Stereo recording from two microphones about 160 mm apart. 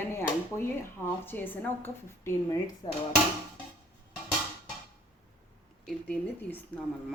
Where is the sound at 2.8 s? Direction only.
30° left (ahead or behind).